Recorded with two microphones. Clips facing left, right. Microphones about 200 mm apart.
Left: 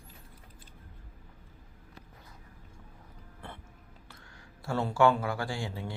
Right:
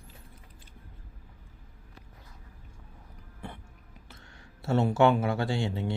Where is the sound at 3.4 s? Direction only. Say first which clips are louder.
Right 3 dB; 15° right (ahead or behind).